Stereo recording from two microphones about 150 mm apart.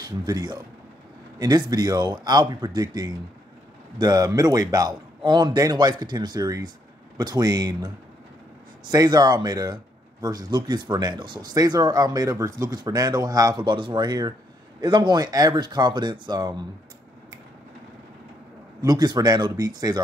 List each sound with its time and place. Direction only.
0.2 s speech: 30° right (ahead or behind)
18.8 s speech: 25° right (ahead or behind)